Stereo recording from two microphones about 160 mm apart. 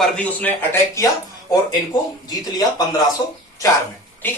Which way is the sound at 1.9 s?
25° left (ahead or behind).